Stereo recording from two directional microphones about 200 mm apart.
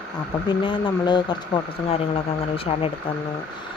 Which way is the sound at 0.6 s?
20° left (ahead or behind).